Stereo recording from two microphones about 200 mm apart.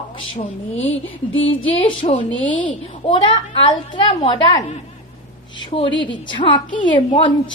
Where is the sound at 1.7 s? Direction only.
30° left (ahead or behind).